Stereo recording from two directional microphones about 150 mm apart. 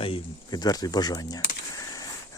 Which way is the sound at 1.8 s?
25° left (ahead or behind).